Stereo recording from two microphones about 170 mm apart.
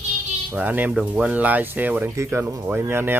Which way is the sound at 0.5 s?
10° right (ahead or behind).